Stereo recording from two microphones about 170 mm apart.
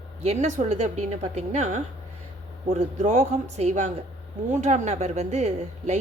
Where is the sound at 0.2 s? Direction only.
40° right (ahead or behind).